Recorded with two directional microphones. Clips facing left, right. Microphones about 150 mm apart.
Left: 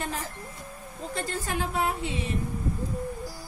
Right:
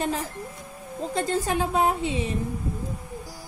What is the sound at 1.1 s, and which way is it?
A woman's voice, 20° right (ahead or behind).